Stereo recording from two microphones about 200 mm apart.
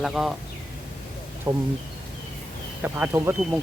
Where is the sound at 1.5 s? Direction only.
15° right (ahead or behind).